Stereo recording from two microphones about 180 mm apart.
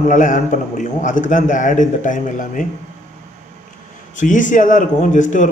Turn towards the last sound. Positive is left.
turn(degrees=45)  # may be behind; listen again after turning